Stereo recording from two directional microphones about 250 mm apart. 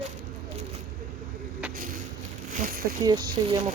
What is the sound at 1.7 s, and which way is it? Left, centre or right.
Vehicle, right.